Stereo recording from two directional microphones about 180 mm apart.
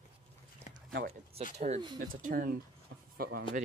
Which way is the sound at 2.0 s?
45° right (ahead or behind).